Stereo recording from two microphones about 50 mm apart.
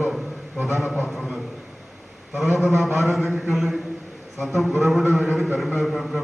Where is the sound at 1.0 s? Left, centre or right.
Centre.